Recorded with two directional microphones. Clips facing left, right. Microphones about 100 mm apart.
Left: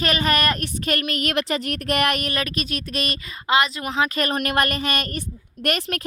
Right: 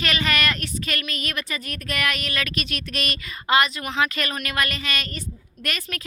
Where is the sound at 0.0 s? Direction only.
40° left (ahead or behind).